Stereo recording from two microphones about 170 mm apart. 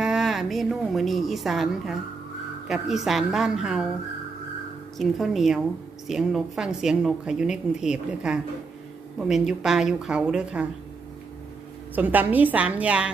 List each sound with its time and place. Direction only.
0.0 s a woman's voice: centre (ahead or behind)
4.9 s a woman's voice: centre (ahead or behind)
11.9 s a woman's voice: 10° right (ahead or behind)